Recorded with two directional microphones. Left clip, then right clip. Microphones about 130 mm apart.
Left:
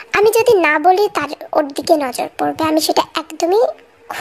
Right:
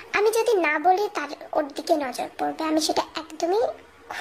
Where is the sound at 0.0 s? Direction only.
50° left (ahead or behind).